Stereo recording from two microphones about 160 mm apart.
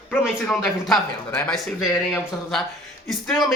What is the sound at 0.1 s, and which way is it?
Speech, 5° left (ahead or behind).